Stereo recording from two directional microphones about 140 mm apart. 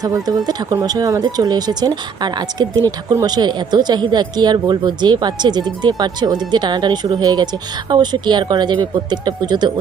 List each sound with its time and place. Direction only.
0.0 s speech: 25° right (ahead or behind)